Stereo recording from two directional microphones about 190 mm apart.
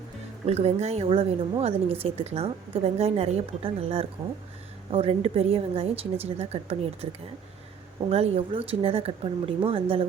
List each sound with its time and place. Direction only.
0.4 s a woman's voice: 35° right (ahead or behind)
8.1 s a woman's voice: 30° right (ahead or behind)